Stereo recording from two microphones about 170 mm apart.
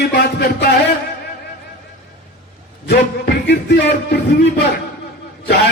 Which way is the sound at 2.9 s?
70° left (ahead or behind).